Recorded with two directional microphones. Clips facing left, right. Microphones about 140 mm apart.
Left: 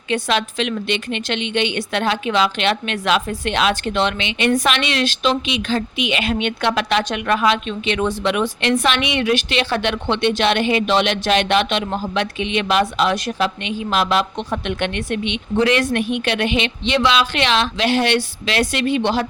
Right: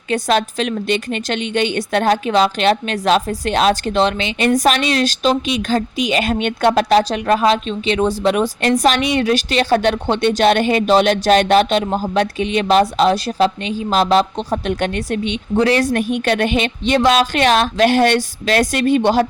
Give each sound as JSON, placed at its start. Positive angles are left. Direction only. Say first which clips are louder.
{"t": 0.1, "sound": "a woman's voice", "louder": "right 3 dB", "side_deg": -40}